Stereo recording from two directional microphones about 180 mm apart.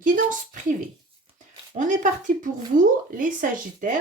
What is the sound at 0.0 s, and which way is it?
Speech, 45° right (ahead or behind).